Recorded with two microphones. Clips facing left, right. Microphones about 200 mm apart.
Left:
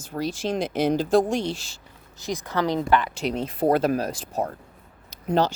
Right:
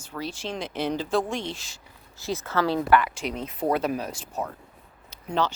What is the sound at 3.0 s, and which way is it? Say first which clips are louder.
Speech: left 5 dB; 30° left (ahead or behind).